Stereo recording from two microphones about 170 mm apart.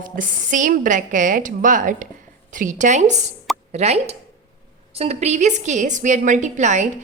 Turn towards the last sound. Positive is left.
turn(degrees=-45)  # may be behind; listen again after turning